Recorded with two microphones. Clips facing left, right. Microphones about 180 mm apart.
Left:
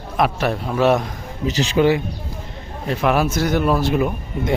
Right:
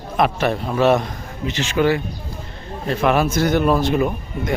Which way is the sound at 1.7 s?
20° left (ahead or behind).